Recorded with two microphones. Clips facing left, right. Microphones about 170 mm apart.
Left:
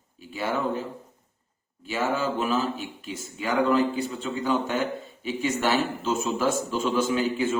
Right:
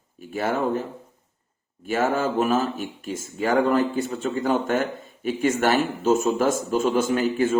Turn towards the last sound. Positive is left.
turn(degrees=-50)  # may be behind; listen again after turning